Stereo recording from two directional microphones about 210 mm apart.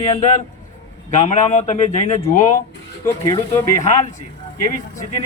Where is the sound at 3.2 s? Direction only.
15° left (ahead or behind).